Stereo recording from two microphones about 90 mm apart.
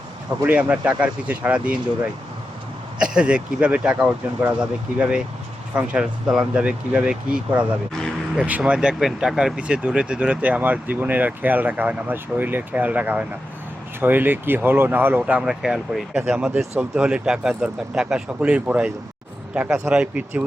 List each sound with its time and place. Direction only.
0.4 s speech: 15° right (ahead or behind)
3.0 s speech: 10° right (ahead or behind)
15.2 s speech: 5° right (ahead or behind)